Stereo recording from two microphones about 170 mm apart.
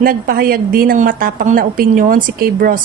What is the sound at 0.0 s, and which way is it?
A woman's voice, 60° right (ahead or behind).